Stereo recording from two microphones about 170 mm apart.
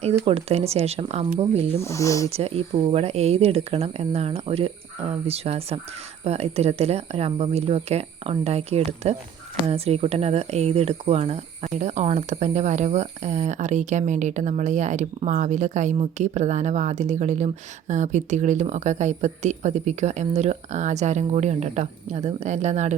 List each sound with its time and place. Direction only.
0.3 s speech: 35° right (ahead or behind)
1.8 s speech: 15° left (ahead or behind)
2.3 s speech: 35° right (ahead or behind)